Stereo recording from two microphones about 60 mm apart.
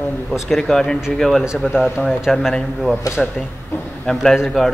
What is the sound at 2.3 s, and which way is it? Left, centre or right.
A man's voice, centre.